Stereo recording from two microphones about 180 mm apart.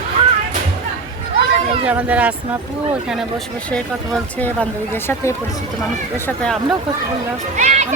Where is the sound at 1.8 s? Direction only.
10° right (ahead or behind).